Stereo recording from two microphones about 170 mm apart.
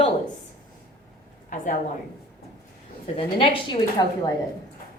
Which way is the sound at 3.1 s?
30° left (ahead or behind).